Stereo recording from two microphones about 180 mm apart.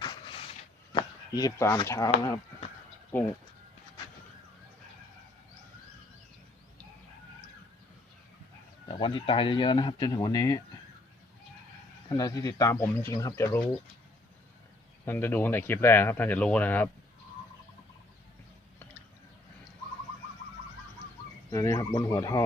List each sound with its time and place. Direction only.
0.0 s a sound: 25° left (ahead or behind)
0.9 s speech: 20° left (ahead or behind)
3.1 s speech: 10° left (ahead or behind)
8.9 s speech: 30° left (ahead or behind)
12.0 s speech: 20° left (ahead or behind)
15.0 s speech: 10° left (ahead or behind)
21.5 s speech: 20° left (ahead or behind)